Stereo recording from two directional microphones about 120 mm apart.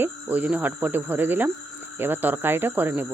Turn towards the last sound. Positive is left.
turn(degrees=-15)  # may be behind; listen again after turning